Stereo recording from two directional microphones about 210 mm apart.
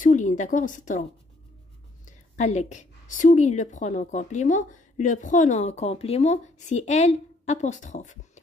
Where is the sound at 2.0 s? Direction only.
35° left (ahead or behind).